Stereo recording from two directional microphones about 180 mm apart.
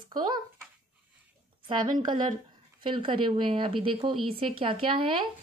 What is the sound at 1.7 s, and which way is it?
Speech, 25° right (ahead or behind).